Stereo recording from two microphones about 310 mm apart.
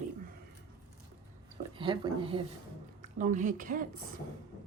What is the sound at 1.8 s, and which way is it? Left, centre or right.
Speech, centre.